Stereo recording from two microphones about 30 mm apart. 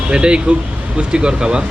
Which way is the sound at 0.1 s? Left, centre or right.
Right.